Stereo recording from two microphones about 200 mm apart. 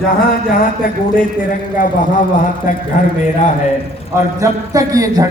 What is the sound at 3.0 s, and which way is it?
Speech, 40° left (ahead or behind).